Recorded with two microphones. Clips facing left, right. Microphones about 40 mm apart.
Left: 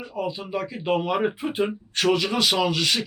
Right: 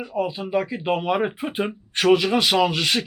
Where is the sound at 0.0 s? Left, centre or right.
Right.